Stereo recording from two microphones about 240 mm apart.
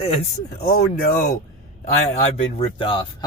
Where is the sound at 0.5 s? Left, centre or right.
Left.